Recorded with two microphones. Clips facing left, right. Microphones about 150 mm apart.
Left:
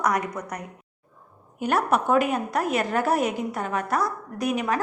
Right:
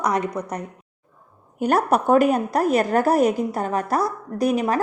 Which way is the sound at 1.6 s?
40° right (ahead or behind).